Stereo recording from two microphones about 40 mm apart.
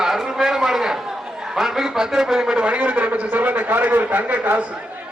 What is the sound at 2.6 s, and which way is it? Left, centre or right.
A man's voice, right.